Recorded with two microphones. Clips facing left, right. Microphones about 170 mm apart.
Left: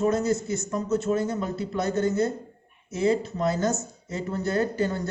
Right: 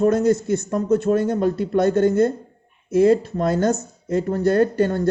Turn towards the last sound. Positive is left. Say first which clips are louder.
# right 7 dB
turn(degrees=-55)  # may be behind; listen again after turning